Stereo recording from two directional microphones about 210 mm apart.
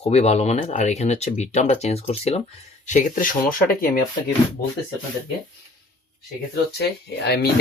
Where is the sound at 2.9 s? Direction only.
40° left (ahead or behind).